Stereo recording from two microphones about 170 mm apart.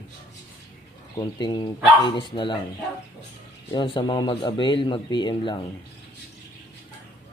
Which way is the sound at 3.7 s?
25° left (ahead or behind).